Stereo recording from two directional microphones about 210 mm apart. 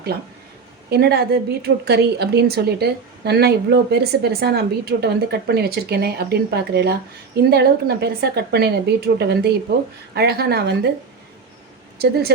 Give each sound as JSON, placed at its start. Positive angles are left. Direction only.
{"t": 0.9, "sound": "a woman's voice", "side_deg": -50}
{"t": 11.9, "sound": "speech", "side_deg": -50}